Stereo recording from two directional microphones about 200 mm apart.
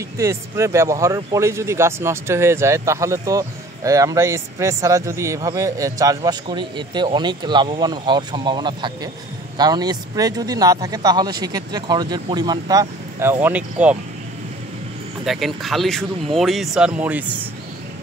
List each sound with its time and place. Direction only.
0.2 s speech: 15° right (ahead or behind)
15.2 s speech: centre (ahead or behind)